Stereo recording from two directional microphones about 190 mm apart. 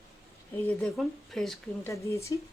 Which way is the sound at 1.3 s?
Centre (ahead or behind).